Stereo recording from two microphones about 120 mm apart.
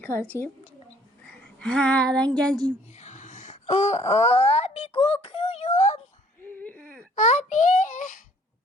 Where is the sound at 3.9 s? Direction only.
65° left (ahead or behind).